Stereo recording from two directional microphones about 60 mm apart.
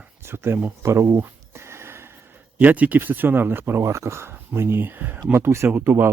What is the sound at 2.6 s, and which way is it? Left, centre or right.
Speech, right.